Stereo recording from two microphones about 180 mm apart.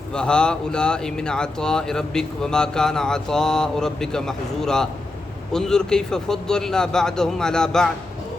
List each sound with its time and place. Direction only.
0.1 s speech: 5° left (ahead or behind)